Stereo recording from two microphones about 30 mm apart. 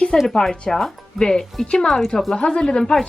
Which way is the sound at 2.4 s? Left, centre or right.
Left.